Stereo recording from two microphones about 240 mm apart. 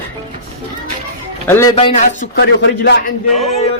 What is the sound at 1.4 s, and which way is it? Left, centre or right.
Speech, centre.